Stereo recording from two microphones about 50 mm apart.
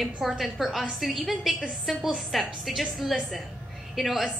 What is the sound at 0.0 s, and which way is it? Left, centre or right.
A woman's voice, centre.